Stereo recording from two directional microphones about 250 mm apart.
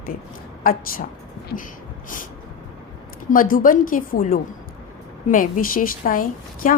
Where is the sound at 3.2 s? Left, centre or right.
Left.